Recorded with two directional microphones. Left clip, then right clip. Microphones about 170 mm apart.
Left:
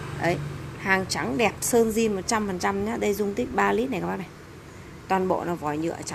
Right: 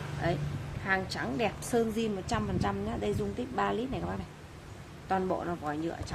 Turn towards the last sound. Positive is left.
turn(degrees=10)  # may be behind; listen again after turning